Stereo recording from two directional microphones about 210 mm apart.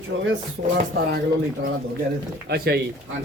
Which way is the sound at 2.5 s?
50° right (ahead or behind).